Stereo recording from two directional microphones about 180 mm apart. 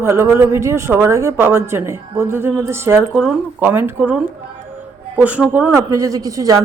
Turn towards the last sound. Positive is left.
turn(degrees=-20)  # may be behind; listen again after turning